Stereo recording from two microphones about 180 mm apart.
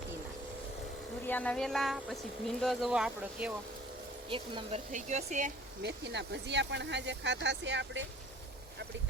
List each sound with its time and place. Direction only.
1.3 s speech: 10° left (ahead or behind)
4.3 s speech: 30° right (ahead or behind)
4.9 s speech: 40° right (ahead or behind)
5.8 s speech: 75° right (ahead or behind)